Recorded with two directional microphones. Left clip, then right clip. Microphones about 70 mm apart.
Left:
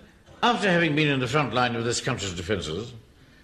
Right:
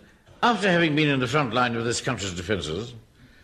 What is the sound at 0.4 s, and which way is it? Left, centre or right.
A man's voice, right.